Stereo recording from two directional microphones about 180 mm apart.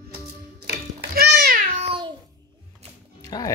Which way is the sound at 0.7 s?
55° right (ahead or behind).